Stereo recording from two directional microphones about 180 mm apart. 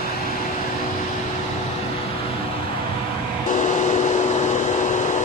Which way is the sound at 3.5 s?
45° left (ahead or behind).